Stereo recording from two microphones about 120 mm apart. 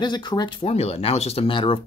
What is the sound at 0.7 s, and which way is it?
Speech, 60° left (ahead or behind).